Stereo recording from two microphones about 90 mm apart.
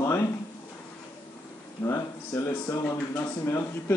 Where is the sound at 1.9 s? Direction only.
35° left (ahead or behind).